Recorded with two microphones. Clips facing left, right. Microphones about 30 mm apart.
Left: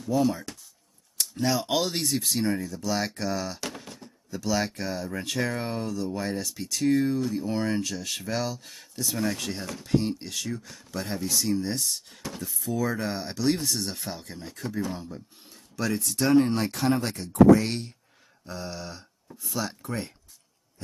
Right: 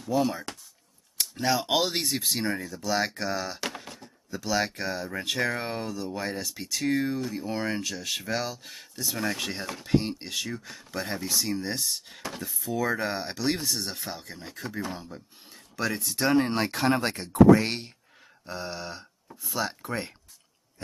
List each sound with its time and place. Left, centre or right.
0.0 s speech: centre
12.4 s speech: centre
12.7 s speech: centre
18.4 s a sound: right
19.5 s speech: centre